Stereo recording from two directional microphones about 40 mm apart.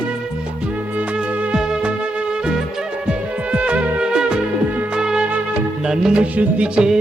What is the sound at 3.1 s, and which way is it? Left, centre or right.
Music, right.